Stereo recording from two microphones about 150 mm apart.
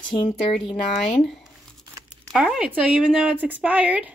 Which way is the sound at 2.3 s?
5° right (ahead or behind).